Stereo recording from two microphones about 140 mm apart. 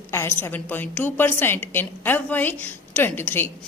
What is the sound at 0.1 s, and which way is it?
A woman's voice, 20° left (ahead or behind).